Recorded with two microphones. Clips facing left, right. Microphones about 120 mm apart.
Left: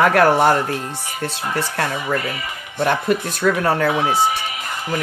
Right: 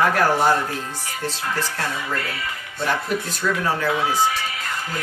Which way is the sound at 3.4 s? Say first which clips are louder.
Left 6 dB; 55° left (ahead or behind).